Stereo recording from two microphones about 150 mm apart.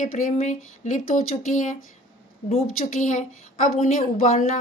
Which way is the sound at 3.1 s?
55° left (ahead or behind).